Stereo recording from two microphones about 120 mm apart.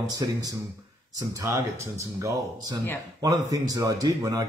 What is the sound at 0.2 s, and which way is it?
Speech, 30° right (ahead or behind).